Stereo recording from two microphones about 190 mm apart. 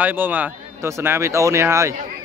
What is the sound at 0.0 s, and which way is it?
Speech, 10° right (ahead or behind).